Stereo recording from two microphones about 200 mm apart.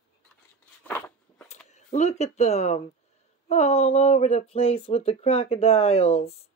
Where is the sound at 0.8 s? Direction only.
10° left (ahead or behind).